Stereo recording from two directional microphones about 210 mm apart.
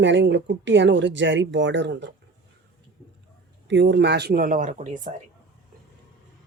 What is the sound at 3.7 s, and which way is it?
Speech, 55° right (ahead or behind).